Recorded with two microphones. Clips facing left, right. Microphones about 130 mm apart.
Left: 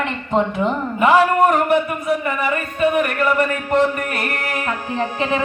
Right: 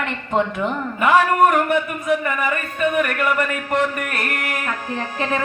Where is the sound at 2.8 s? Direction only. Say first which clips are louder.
Left 2 dB; 30° left (ahead or behind).